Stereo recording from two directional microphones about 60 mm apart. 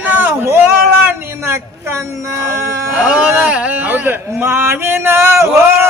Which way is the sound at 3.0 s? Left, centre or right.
Centre.